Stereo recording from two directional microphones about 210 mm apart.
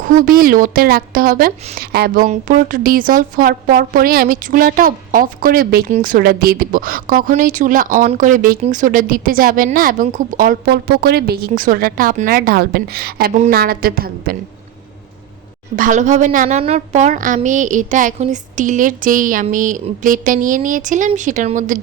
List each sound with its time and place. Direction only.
0.0 s a woman's voice: 40° right (ahead or behind)
15.7 s a woman's voice: 40° right (ahead or behind)